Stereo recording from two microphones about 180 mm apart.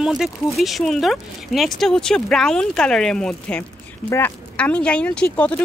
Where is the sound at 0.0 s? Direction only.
Centre (ahead or behind).